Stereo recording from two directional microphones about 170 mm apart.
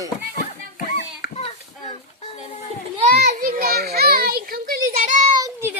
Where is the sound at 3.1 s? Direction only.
65° right (ahead or behind).